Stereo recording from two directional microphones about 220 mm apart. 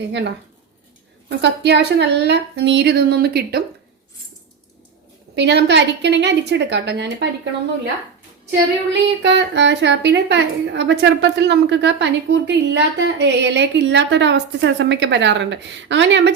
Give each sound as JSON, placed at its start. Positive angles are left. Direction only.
{"t": 0.1, "sound": "a woman's voice", "side_deg": -50}
{"t": 5.3, "sound": "a woman's voice", "side_deg": -50}
{"t": 8.9, "sound": "a woman's voice", "side_deg": -50}